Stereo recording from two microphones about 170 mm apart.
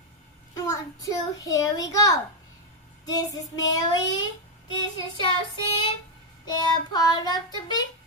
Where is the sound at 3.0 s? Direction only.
20° left (ahead or behind).